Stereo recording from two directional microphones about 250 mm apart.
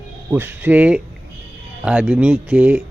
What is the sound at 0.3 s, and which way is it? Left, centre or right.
Speech, centre.